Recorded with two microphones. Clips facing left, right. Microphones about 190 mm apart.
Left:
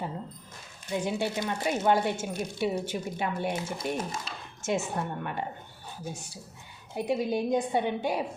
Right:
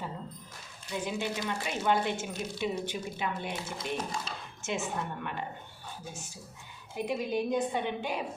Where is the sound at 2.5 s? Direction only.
45° left (ahead or behind).